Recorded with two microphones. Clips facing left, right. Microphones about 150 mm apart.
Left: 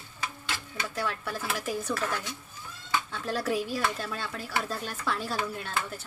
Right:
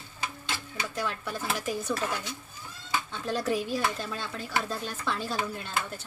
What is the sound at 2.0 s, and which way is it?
Speech, 20° right (ahead or behind).